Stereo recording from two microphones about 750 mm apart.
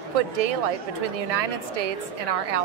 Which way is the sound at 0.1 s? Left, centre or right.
Right.